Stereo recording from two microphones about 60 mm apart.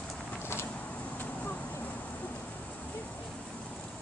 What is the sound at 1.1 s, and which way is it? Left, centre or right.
Vehicle, left.